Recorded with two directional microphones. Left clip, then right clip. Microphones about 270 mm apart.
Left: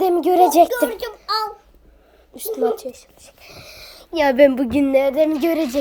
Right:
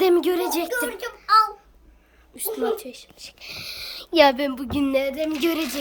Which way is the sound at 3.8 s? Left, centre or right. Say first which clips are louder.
Right 3 dB; centre.